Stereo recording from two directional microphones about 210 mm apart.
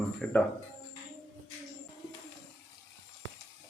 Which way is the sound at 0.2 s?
5° left (ahead or behind).